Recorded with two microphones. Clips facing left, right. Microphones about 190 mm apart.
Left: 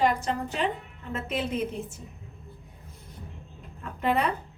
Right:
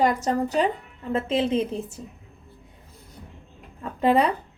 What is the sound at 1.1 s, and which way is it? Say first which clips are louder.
Speech: right 7 dB; 30° right (ahead or behind).